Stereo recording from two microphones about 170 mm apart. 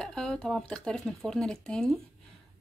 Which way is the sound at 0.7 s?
5° left (ahead or behind).